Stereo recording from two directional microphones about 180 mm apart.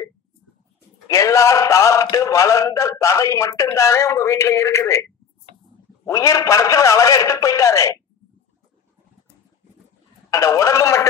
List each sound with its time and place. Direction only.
1.0 s speech: 15° left (ahead or behind)
6.0 s speech: 15° left (ahead or behind)
10.3 s speech: 15° left (ahead or behind)